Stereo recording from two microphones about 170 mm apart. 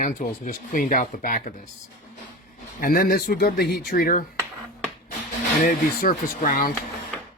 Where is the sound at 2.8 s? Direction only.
55° left (ahead or behind).